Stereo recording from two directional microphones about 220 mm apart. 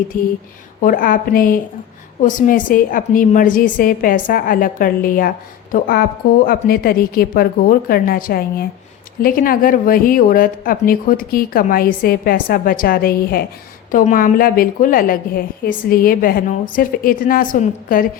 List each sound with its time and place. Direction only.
0.1 s a woman's voice: 40° left (ahead or behind)